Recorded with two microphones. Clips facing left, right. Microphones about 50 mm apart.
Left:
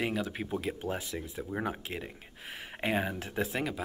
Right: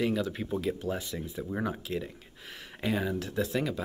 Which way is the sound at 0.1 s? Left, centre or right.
Centre.